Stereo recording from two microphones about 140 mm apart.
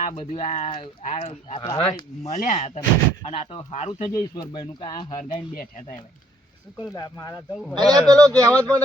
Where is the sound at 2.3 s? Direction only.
55° left (ahead or behind).